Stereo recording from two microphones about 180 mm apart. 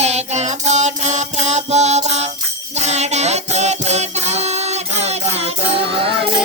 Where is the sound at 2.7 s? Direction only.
40° right (ahead or behind).